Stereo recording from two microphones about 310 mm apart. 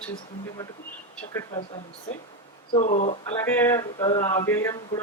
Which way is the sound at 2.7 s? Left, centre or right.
Left.